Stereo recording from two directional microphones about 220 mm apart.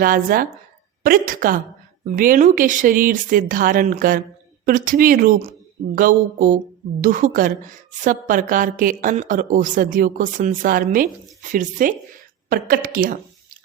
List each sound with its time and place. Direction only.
0.0 s a woman's voice: 40° right (ahead or behind)